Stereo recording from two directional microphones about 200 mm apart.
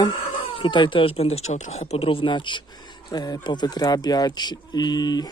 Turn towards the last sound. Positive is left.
turn(degrees=20)  # may be behind; listen again after turning